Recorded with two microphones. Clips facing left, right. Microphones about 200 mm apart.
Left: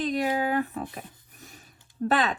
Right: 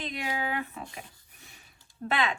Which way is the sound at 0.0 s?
40° left (ahead or behind).